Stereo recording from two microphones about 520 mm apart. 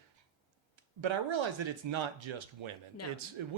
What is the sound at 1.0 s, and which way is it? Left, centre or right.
Speech, right.